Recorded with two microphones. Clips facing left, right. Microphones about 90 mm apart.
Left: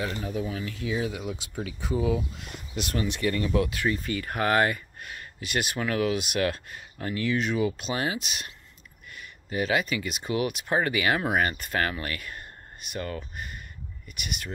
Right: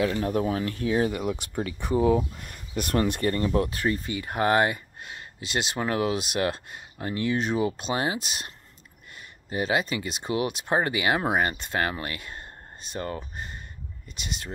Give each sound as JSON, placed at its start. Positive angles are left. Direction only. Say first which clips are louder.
{"t": 0.0, "sound": "speech", "louder": "right 6 dB", "side_deg": -65}
{"t": 2.0, "sound": "speech", "louder": "right 5 dB", "side_deg": -40}
{"t": 4.1, "sound": "speech", "louder": "right 2 dB", "side_deg": -20}